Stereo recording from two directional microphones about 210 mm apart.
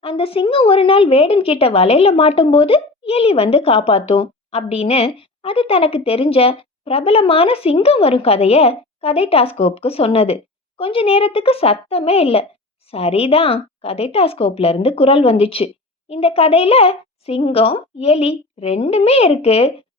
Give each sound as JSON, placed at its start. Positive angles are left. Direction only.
{"t": 0.0, "sound": "speech", "side_deg": 25}